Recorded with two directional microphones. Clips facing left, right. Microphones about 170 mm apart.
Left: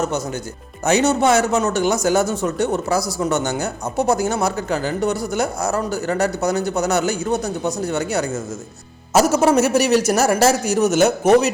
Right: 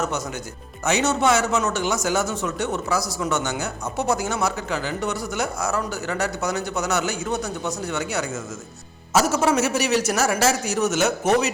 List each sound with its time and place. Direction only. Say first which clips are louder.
0.9 s speech: left 4 dB; 35° left (ahead or behind)